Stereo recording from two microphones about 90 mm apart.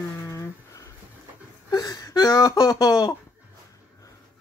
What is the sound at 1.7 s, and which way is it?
Speech, 45° left (ahead or behind).